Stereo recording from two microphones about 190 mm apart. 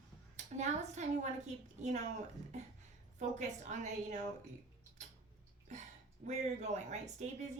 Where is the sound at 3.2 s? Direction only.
40° right (ahead or behind).